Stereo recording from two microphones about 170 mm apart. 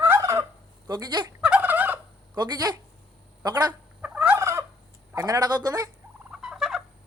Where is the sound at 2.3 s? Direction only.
25° right (ahead or behind).